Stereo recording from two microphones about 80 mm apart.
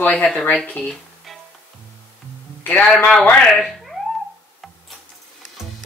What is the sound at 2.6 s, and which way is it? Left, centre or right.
Music, centre.